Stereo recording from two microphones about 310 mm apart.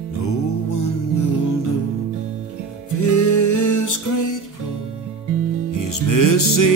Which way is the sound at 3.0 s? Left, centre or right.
Left.